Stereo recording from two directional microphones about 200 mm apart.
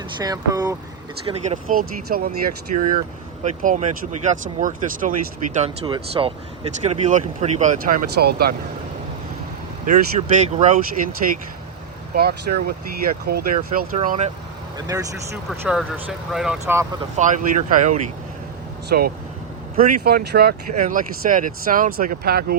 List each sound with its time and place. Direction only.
0.2 s speech: 20° right (ahead or behind)
1.3 s speech: 40° right (ahead or behind)
5.5 s speech: 30° right (ahead or behind); by 8.5 s 50° right (ahead or behind)
9.8 s speech: 40° right (ahead or behind)
12.1 s speech: 50° right (ahead or behind)
14.8 s speech: 20° right (ahead or behind)
15.4 s speech: centre (ahead or behind)
17.2 s speech: 40° right (ahead or behind)